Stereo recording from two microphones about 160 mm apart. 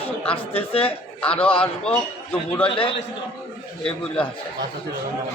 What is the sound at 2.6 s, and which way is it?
Speech, 35° left (ahead or behind).